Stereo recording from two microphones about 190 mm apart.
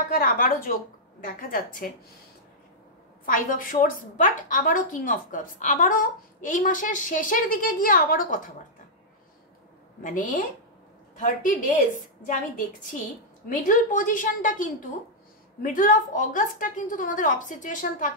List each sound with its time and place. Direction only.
0.1 s a woman's voice: 50° left (ahead or behind)
3.3 s a woman's voice: 45° left (ahead or behind)
10.0 s a woman's voice: 45° left (ahead or behind)
13.5 s a woman's voice: 45° left (ahead or behind)